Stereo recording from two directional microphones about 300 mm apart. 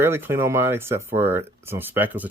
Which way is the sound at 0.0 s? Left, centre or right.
Centre.